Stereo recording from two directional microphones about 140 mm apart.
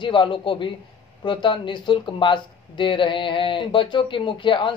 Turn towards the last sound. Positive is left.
turn(degrees=35)  # may be behind; listen again after turning